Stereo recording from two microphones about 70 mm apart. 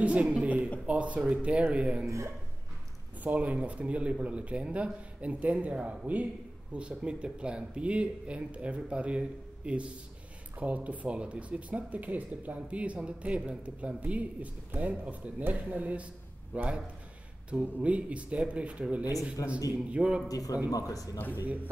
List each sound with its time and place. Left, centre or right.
0.0 s speech: centre
2.0 s speech: right
3.3 s speech: right
19.4 s a man's voice: left
19.9 s speech: centre
20.2 s a man's voice: left